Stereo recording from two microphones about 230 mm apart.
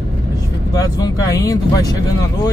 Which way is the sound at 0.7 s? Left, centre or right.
Centre.